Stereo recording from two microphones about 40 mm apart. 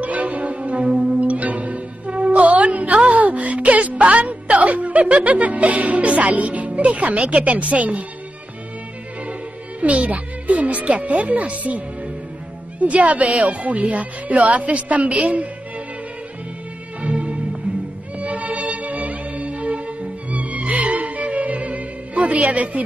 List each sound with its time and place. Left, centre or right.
0.0 s music: right
1.3 s music: right
7.2 s speech: right
9.2 s music: right
10.6 s speech: right
17.0 s music: right
22.5 s speech: right